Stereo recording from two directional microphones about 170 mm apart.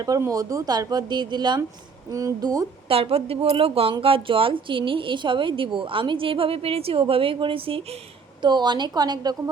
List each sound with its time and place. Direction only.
0.0 s speech: 20° right (ahead or behind)
2.9 s a woman's voice: 35° right (ahead or behind)